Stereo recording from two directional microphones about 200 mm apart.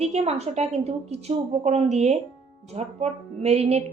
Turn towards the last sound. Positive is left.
turn(degrees=-30)  # may be behind; listen again after turning